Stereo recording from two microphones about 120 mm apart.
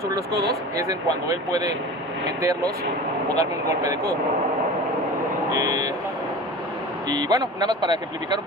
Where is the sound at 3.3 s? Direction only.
30° right (ahead or behind).